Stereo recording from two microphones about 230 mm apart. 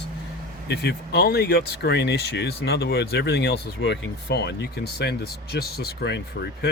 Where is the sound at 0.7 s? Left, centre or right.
Left.